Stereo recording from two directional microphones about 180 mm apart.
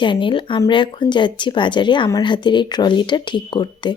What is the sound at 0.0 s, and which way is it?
Speech, 25° left (ahead or behind).